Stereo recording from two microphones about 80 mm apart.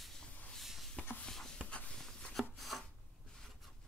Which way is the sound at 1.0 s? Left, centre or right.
Left.